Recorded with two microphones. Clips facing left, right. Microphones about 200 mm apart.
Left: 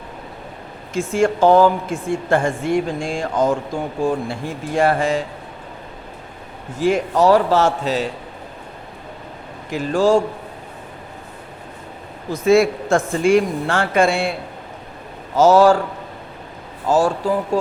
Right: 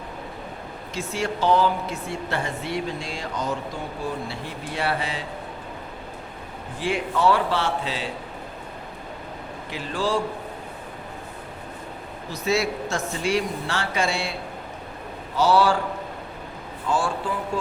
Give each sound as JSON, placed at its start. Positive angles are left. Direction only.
{"t": 0.9, "sound": "speech", "side_deg": 50}
{"t": 6.7, "sound": "speech", "side_deg": 45}
{"t": 9.6, "sound": "speech", "side_deg": 45}
{"t": 12.3, "sound": "speech", "side_deg": 50}
{"t": 15.4, "sound": "speech", "side_deg": 45}
{"t": 16.9, "sound": "speech", "side_deg": 40}